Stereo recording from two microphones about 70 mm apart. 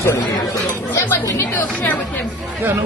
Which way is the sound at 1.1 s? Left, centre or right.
Left.